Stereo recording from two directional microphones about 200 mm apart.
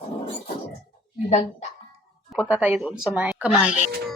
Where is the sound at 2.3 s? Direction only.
5° right (ahead or behind).